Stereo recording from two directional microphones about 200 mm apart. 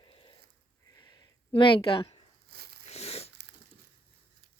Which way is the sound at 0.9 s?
20° left (ahead or behind).